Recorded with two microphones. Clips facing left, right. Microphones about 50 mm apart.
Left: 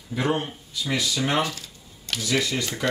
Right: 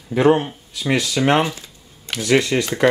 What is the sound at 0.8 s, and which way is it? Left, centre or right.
Speech, right.